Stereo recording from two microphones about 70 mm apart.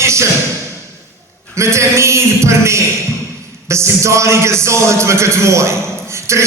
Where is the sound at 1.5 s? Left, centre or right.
Right.